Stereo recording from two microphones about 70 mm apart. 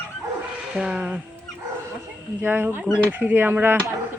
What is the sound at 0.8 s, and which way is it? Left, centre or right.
Speech, centre.